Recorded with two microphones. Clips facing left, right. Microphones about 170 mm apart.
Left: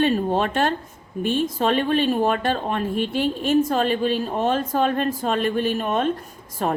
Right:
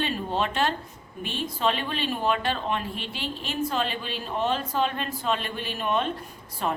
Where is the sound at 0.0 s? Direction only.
45° left (ahead or behind).